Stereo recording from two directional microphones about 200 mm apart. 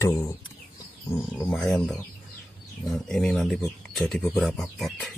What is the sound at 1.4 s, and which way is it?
Speech, 5° left (ahead or behind).